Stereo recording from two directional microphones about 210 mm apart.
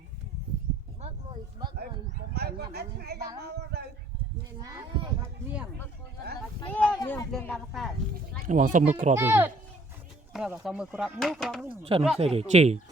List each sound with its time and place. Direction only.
2.3 s speech: 50° right (ahead or behind)
3.4 s a sound: 50° right (ahead or behind)
6.7 s speech: 5° left (ahead or behind)
7.5 s speech: centre (ahead or behind)
8.4 s speech: 35° right (ahead or behind)
9.1 s speech: 10° right (ahead or behind)
11.8 s speech: 25° right (ahead or behind)